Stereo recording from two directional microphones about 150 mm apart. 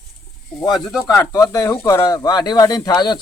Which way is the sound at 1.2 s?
20° left (ahead or behind).